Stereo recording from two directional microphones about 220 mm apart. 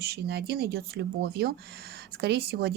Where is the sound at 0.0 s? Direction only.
45° right (ahead or behind).